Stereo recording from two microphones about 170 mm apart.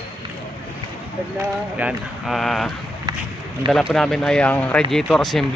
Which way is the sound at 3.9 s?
5° left (ahead or behind).